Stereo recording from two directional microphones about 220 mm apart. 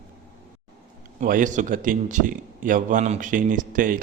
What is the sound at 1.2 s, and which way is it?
Mantra, 35° right (ahead or behind).